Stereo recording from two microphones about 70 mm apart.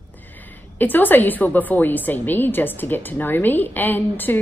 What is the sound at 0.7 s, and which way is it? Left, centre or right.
A woman's voice, left.